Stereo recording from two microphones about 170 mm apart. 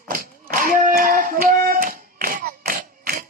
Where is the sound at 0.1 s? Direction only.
55° right (ahead or behind).